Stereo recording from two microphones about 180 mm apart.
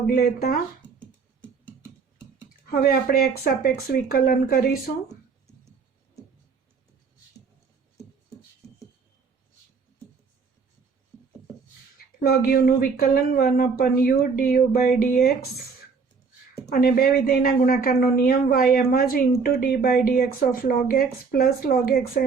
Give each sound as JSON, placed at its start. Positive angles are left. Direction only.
{"t": 0.1, "sound": "speech", "side_deg": 55}
{"t": 2.6, "sound": "speech", "side_deg": 60}
{"t": 12.2, "sound": "speech", "side_deg": 55}
{"t": 16.6, "sound": "speech", "side_deg": 55}